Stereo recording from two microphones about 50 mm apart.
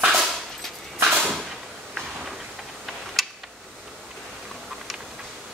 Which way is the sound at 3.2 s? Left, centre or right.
Centre.